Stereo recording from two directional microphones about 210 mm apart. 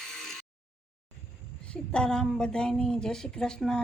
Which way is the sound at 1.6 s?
5° left (ahead or behind).